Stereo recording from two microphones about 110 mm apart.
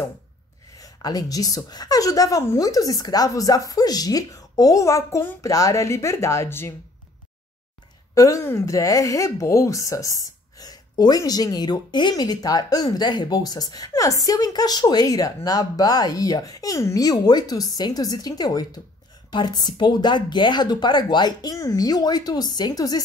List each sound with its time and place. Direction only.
0.7 s speech: 35° left (ahead or behind)
8.1 s speech: 30° left (ahead or behind)